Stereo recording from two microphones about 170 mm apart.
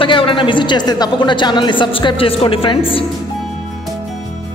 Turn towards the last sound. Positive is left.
turn(degrees=30)  # may be behind; listen again after turning